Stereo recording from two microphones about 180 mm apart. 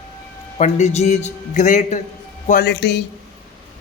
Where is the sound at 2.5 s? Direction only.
60° left (ahead or behind).